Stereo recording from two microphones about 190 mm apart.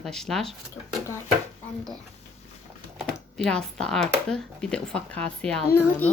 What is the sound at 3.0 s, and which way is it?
Speech, 5° left (ahead or behind).